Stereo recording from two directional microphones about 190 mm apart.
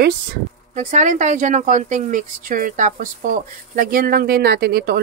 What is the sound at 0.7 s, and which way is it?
Speech, 40° right (ahead or behind).